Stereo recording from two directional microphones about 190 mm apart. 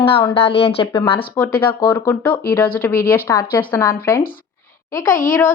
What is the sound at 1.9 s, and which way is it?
Speech, 10° left (ahead or behind).